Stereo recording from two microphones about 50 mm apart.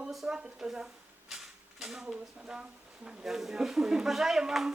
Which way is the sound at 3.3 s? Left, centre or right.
Centre.